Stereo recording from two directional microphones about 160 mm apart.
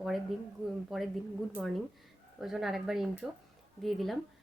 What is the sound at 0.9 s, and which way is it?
Speech, centre (ahead or behind).